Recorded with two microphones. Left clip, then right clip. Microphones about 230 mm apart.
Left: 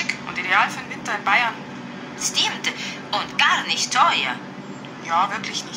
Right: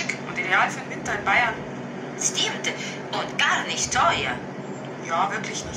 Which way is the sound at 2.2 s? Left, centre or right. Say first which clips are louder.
Left 3 dB; left.